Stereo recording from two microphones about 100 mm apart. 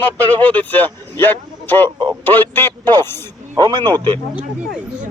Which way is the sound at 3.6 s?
45° right (ahead or behind).